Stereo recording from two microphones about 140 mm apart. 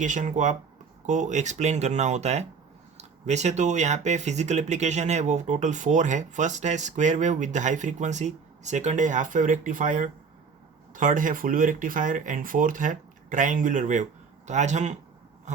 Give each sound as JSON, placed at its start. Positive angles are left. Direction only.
{"t": 0.0, "sound": "speech", "side_deg": -60}